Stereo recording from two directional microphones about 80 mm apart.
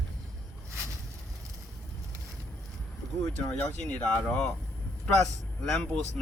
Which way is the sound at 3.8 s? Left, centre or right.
Centre.